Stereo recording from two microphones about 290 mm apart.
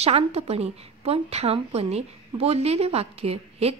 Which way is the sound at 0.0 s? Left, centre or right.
Right.